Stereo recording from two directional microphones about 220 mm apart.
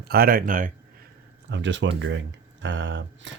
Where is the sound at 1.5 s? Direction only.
55° right (ahead or behind).